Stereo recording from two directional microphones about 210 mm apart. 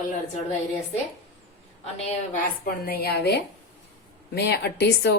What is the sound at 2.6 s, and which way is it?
Speech, 45° left (ahead or behind).